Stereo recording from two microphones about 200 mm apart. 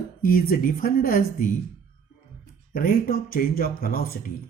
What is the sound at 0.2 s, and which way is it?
Speech, 45° left (ahead or behind).